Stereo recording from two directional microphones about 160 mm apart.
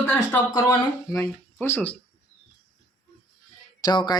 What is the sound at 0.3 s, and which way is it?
Speech, 20° left (ahead or behind).